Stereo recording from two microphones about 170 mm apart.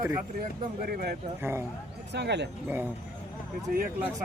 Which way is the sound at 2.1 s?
85° right.